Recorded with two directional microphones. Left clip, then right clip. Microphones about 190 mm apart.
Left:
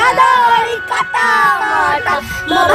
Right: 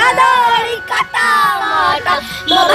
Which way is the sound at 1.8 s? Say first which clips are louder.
Even; 10° left (ahead or behind).